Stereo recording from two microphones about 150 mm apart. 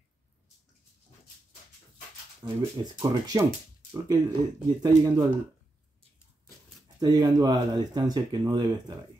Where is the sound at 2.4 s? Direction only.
30° right (ahead or behind).